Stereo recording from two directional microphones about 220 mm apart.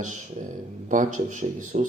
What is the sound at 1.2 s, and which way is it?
Speech, 35° right (ahead or behind).